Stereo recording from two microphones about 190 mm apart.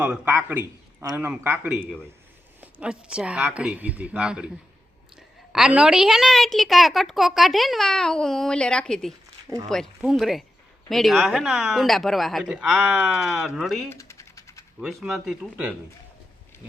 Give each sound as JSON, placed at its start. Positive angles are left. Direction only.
{"t": 0.0, "sound": "a woman's voice", "side_deg": -10}
{"t": 13.9, "sound": "typing", "side_deg": 15}
{"t": 14.8, "sound": "a woman's voice", "side_deg": 0}